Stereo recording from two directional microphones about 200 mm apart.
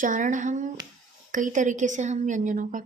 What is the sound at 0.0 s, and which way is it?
Speech, 40° right (ahead or behind).